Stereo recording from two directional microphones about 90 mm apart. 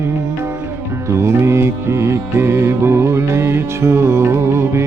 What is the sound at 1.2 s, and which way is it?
Music, 30° right (ahead or behind).